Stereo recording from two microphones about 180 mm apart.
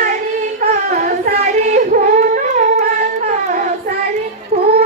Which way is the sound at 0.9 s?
45° right (ahead or behind).